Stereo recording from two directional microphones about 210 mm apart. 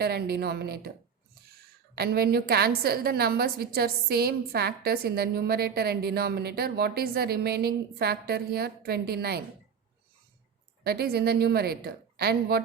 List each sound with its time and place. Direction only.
0.0 s a woman's voice: 50° right (ahead or behind)
2.0 s a woman's voice: 50° right (ahead or behind)
10.8 s a woman's voice: 50° right (ahead or behind)